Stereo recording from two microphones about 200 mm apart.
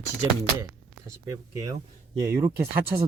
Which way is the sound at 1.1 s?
15° right (ahead or behind).